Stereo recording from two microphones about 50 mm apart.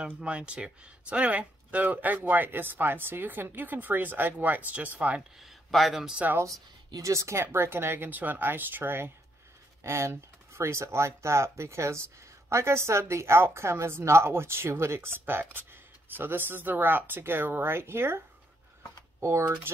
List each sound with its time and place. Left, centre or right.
0.2 s speech: right
5.4 s speech: centre
7.0 s speech: right
7.5 s speech: right
9.8 s speech: right